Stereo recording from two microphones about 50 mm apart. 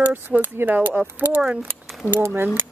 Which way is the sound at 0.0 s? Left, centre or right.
Right.